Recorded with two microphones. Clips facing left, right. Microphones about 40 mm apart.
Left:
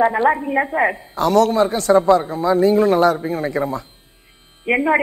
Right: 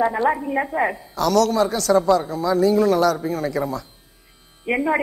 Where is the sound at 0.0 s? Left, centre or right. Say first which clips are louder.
Left 4 dB; left.